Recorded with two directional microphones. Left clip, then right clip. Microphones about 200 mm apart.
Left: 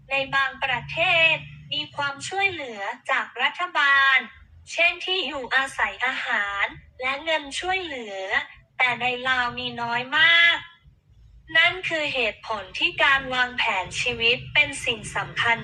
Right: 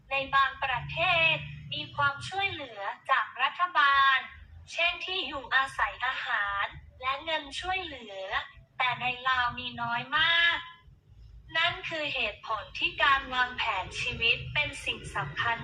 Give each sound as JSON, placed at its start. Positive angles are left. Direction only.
{"t": 0.1, "sound": "a woman's voice", "side_deg": 35}